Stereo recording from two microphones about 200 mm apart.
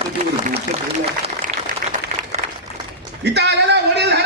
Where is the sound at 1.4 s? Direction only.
40° right (ahead or behind).